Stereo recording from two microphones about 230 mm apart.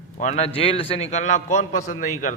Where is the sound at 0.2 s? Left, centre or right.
Left.